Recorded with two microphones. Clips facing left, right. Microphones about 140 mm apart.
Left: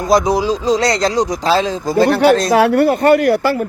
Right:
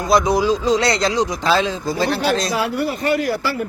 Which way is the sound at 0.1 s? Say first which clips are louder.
Left 2 dB; 35° left (ahead or behind).